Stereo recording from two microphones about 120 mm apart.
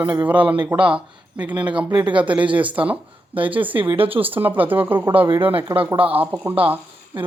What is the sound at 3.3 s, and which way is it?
Speech, 45° right (ahead or behind).